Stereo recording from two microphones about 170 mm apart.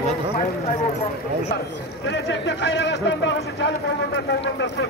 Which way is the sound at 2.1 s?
85° left.